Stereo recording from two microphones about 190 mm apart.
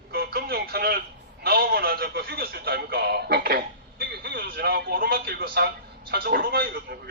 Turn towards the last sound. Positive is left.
turn(degrees=-55)  # may be behind; listen again after turning